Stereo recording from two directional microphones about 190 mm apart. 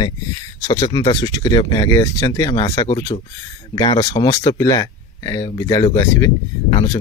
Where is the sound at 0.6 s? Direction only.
20° left (ahead or behind).